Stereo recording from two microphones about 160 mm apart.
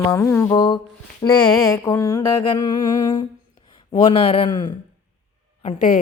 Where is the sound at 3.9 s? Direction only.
35° left (ahead or behind).